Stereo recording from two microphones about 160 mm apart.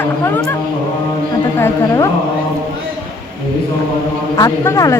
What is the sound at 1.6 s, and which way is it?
Speech, 20° left (ahead or behind).